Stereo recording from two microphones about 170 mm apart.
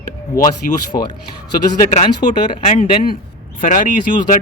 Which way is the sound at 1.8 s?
50° left (ahead or behind).